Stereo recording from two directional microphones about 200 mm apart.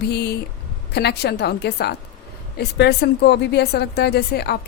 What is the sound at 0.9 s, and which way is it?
Speech, 55° left (ahead or behind).